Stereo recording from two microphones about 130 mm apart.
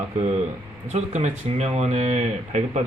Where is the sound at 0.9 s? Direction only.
60° right (ahead or behind).